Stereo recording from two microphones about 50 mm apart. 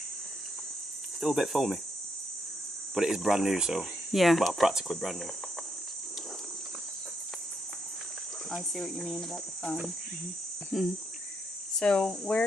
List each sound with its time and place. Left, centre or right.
1.2 s speech: centre
2.9 s speech: centre
8.7 s speech: centre
10.7 s speech: centre
11.8 s speech: centre